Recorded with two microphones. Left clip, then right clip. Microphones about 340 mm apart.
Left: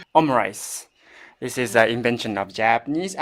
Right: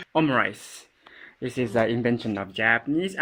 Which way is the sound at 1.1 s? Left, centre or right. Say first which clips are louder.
Left 3 dB; left.